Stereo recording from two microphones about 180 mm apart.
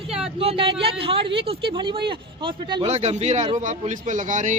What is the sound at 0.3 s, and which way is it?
Speech, 30° right (ahead or behind).